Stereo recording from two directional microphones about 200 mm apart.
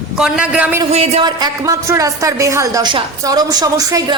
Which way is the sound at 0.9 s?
30° right (ahead or behind).